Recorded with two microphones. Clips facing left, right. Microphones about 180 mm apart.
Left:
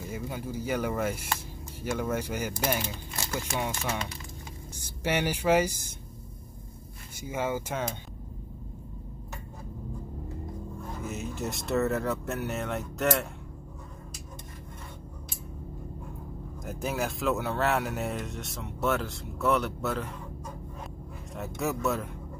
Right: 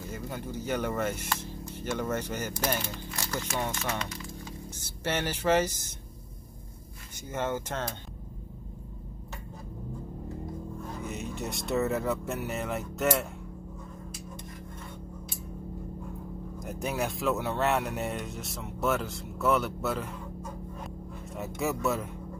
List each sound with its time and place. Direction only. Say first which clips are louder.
0.1 s speech: left 2 dB; 10° left (ahead or behind)
3.1 s speech: even; 25° left (ahead or behind)
3.5 s speech: left 1 dB; 10° left (ahead or behind)
7.2 s speech: left 1 dB; 10° left (ahead or behind)
11.0 s speech: left 2 dB; centre (ahead or behind)
16.5 s speech: even; centre (ahead or behind)